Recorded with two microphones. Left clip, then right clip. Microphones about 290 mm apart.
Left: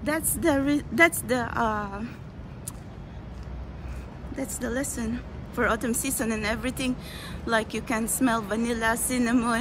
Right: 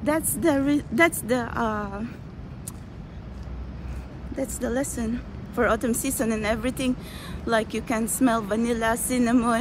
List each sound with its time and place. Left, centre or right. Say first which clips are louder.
0.0 s a woman's voice: right 3 dB; centre
4.4 s a woman's voice: right 3 dB; centre